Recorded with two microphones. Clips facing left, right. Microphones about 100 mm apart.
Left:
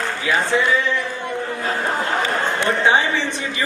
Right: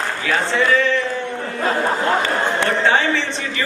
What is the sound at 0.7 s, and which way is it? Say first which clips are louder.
Speech: right 3 dB; 15° left (ahead or behind).